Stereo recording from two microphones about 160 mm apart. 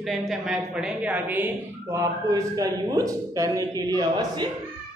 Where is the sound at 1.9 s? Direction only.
20° right (ahead or behind).